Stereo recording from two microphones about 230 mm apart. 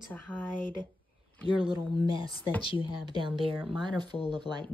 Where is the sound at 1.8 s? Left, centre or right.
Centre.